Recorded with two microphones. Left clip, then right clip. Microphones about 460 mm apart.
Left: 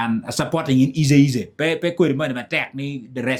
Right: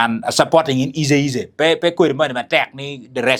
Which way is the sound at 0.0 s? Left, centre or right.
Right.